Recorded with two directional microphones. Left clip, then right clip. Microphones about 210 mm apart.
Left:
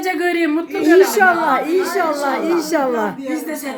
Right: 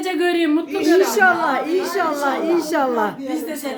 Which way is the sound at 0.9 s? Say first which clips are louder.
Left 3 dB; 15° left (ahead or behind).